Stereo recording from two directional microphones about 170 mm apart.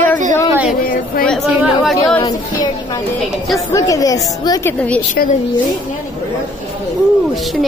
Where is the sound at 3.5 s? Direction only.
20° left (ahead or behind).